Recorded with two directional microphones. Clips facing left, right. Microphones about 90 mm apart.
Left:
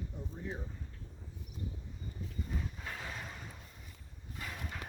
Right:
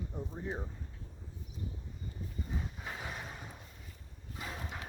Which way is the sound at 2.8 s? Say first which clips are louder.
Right 1 dB; 15° right (ahead or behind).